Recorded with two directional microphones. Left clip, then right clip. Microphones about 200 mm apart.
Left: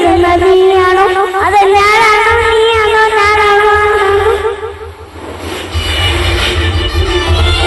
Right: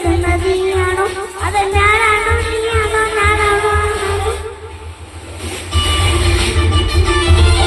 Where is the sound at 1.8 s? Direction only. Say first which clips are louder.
Left 5 dB; 40° left (ahead or behind).